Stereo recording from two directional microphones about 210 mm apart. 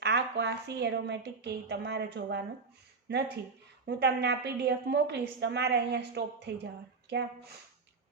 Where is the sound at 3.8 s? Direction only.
50° right (ahead or behind).